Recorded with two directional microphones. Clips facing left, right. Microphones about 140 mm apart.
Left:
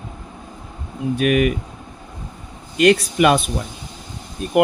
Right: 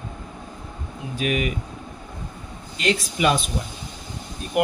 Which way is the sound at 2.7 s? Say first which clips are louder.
Left 9 dB; 60° left (ahead or behind).